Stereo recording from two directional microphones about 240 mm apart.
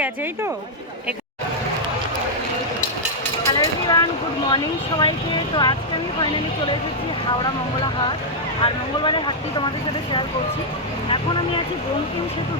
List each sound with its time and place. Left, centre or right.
3.6 s a sound: centre
4.5 s speech: centre
8.6 s speech: centre